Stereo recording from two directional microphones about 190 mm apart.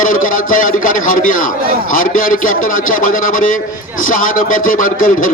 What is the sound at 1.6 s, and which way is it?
Speech, 50° right (ahead or behind).